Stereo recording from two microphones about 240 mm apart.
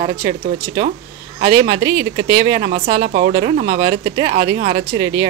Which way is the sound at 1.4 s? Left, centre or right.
Centre.